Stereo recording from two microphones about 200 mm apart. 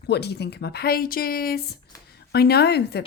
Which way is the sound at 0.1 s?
55° left (ahead or behind).